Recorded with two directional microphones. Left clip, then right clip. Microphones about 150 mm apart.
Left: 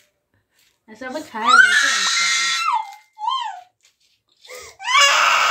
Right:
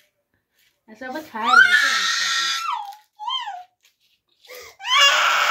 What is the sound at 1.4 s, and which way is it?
Screaming, centre (ahead or behind).